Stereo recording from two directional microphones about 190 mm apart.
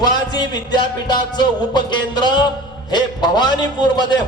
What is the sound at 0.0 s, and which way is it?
Music, 20° left (ahead or behind).